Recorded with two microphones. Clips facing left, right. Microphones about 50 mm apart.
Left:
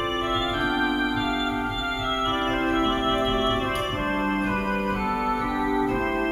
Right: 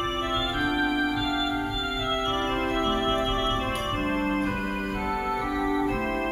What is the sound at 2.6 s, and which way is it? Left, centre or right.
Organ, centre.